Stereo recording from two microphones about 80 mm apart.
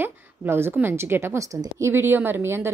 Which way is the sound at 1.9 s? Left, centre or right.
Right.